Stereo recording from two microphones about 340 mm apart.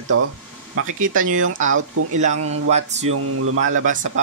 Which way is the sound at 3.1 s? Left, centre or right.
Right.